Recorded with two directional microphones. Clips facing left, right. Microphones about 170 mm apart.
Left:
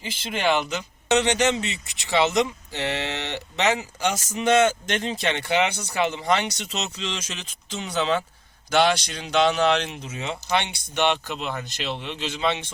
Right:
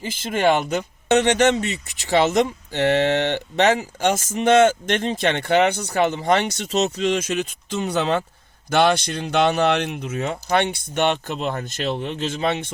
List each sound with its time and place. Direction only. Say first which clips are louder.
0.0 s speech: right 5 dB; 45° right (ahead or behind)